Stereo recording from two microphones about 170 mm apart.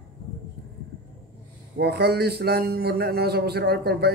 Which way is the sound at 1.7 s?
75° right (ahead or behind).